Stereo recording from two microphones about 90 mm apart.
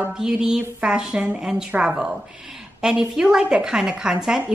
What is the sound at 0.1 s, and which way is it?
A woman's voice, 10° right (ahead or behind).